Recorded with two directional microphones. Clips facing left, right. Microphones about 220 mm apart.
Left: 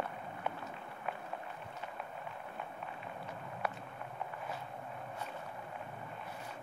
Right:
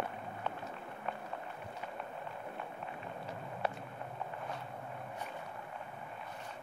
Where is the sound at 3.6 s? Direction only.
30° right (ahead or behind).